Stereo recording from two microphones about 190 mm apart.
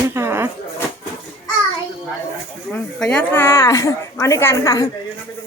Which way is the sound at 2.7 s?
5° left (ahead or behind).